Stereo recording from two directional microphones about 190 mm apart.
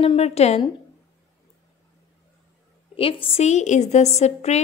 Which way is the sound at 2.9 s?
30° left (ahead or behind).